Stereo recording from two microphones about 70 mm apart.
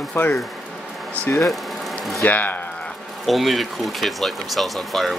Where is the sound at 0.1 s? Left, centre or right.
Left.